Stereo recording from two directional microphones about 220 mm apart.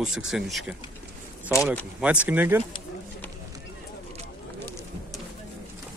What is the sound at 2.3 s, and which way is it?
Speech, 10° right (ahead or behind).